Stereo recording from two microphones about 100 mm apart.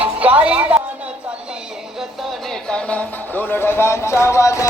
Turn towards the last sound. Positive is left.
turn(degrees=30)  # may be behind; listen again after turning